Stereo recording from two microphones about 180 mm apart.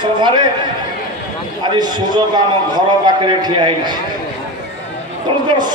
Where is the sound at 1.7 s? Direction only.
25° right (ahead or behind).